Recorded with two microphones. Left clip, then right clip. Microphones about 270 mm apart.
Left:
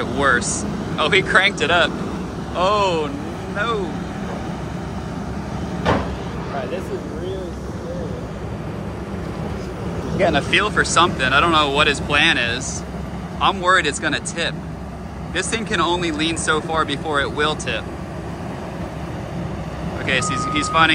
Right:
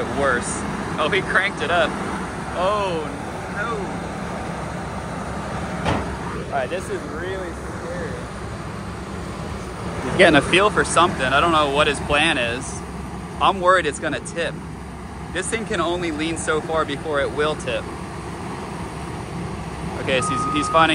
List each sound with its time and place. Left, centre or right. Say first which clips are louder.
0.0 s vehicle: left 3 dB; centre
0.9 s speech: left 4 dB; centre
10.1 s speech: right 4 dB; right
10.5 s speech: even; centre
20.1 s speech: even; centre